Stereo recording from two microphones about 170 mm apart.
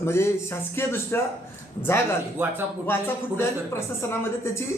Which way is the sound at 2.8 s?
10° left (ahead or behind).